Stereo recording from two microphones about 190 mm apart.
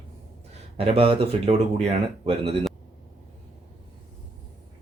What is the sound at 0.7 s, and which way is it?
Speech, 30° right (ahead or behind).